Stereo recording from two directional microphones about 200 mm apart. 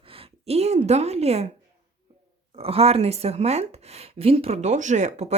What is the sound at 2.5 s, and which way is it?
Speech, 30° right (ahead or behind).